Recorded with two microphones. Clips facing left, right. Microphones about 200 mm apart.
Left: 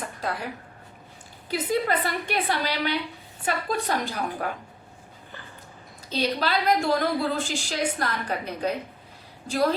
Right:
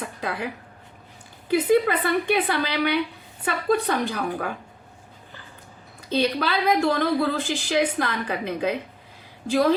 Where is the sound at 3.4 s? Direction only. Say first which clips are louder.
Right 4 dB; 60° right (ahead or behind).